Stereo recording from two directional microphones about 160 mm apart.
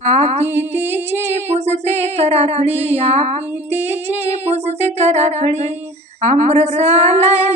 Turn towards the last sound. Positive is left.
turn(degrees=-40)  # may be behind; listen again after turning